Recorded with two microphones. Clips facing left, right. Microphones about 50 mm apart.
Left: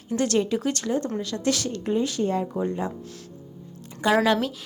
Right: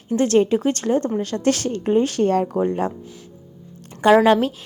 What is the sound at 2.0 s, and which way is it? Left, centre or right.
Speech, right.